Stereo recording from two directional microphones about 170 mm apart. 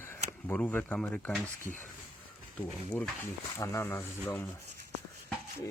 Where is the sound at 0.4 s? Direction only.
10° left (ahead or behind).